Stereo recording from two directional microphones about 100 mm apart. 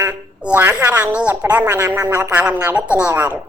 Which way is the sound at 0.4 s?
20° right (ahead or behind).